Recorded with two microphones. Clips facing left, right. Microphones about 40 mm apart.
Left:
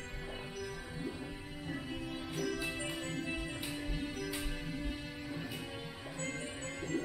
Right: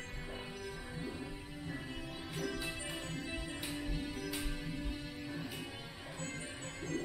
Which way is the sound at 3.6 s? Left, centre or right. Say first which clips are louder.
Left 1 dB; centre.